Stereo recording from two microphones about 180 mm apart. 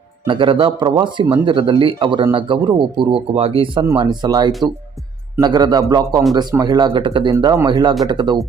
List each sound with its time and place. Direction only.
0.3 s speech: 30° right (ahead or behind)